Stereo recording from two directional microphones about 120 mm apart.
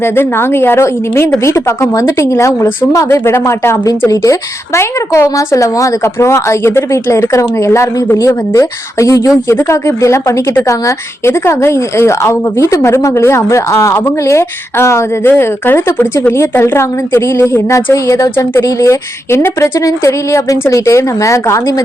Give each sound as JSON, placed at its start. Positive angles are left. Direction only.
{"t": 0.0, "sound": "a woman's voice", "side_deg": 20}